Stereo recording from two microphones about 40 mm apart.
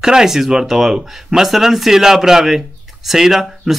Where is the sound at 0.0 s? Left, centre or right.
Centre.